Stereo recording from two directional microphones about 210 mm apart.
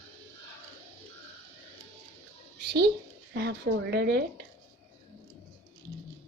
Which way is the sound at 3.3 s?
55° right (ahead or behind).